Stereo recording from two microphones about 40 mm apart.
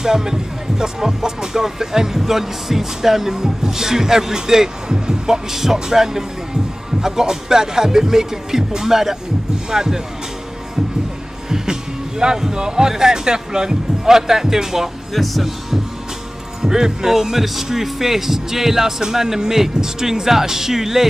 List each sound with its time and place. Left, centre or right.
0.0 s speech: centre
11.4 s speech: centre
16.6 s speech: centre